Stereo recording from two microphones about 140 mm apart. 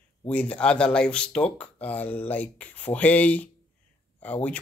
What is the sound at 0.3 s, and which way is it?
Speech, 10° left (ahead or behind).